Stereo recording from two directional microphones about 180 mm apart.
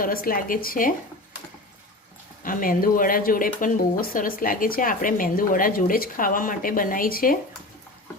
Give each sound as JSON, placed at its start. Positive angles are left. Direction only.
{"t": 0.0, "sound": "speech", "side_deg": 55}
{"t": 2.4, "sound": "speech", "side_deg": 50}